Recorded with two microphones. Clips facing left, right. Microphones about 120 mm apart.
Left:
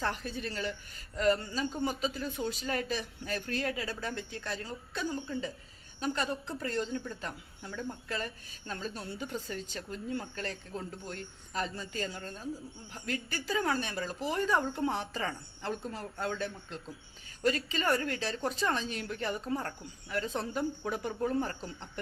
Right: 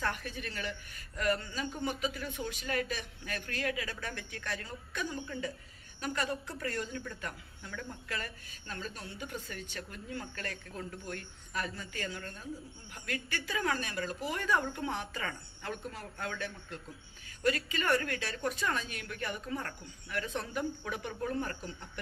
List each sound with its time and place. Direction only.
0.0 s a man's voice: 30° left (ahead or behind)
8.6 s a man's voice: 35° left (ahead or behind)